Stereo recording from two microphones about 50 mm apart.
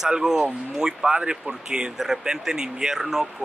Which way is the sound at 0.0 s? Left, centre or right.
Centre.